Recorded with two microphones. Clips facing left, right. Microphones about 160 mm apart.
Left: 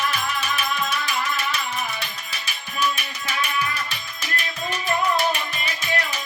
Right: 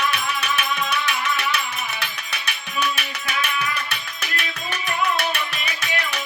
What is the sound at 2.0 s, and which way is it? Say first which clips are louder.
Tabla: right 3 dB; 65° right (ahead or behind).